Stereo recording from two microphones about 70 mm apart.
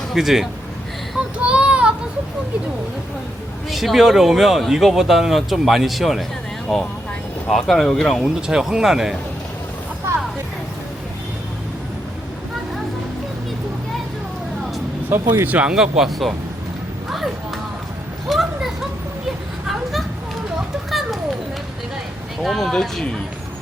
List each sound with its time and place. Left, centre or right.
0.1 s speech: centre
1.4 s child singing: centre
3.7 s speech: centre
8.2 s speech: centre
10.1 s a sound: right
15.1 s speech: right
15.7 s speech: centre
17.1 s a sound: centre
22.4 s speech: centre